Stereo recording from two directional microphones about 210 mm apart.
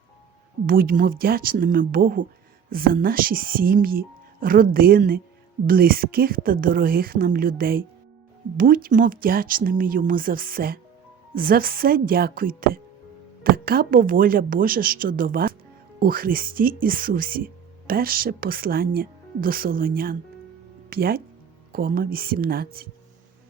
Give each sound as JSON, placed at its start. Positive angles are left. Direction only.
{"t": 0.7, "sound": "speech", "side_deg": -45}